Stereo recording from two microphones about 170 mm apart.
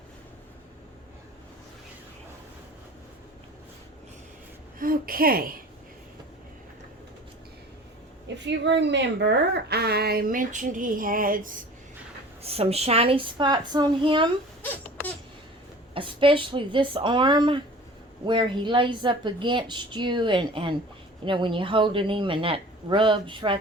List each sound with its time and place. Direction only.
4.8 s a woman's voice: 60° right (ahead or behind)
8.4 s a woman's voice: 90° right; by 11.6 s 55° right (ahead or behind)
12.4 s a woman's voice: 35° right (ahead or behind)
14.6 s baby cry: 10° left (ahead or behind)
16.0 s a woman's voice: 30° right (ahead or behind)